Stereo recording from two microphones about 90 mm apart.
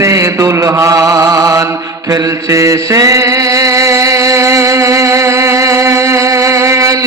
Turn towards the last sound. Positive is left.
turn(degrees=-35)  # may be behind; listen again after turning